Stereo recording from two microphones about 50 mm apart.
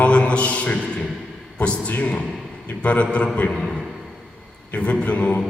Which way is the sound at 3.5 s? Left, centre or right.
Centre.